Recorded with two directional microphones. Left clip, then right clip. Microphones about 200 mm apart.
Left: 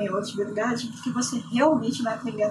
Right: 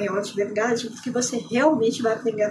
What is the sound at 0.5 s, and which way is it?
Speech, 5° right (ahead or behind).